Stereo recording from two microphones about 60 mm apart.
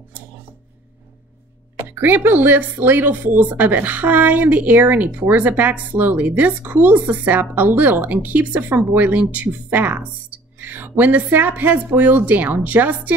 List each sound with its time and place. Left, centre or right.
1.8 s a woman's voice: right